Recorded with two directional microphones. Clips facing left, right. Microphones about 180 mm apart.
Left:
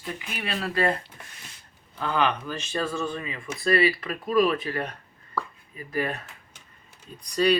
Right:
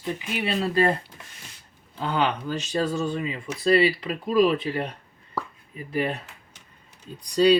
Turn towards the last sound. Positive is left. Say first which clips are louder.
# right 4 dB
turn(degrees=-30)  # may be behind; listen again after turning